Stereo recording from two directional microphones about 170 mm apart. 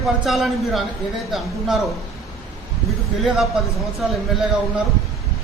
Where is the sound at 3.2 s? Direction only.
Centre (ahead or behind).